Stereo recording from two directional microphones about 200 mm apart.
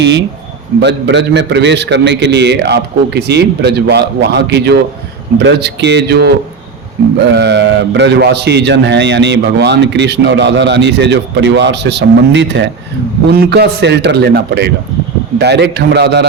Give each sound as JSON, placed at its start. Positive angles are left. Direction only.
{"t": 0.0, "sound": "a man's voice", "side_deg": -60}